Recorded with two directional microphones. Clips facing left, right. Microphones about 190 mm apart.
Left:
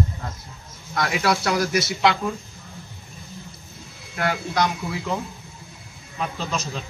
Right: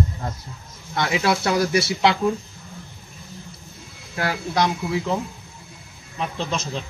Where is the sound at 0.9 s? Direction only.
25° right (ahead or behind).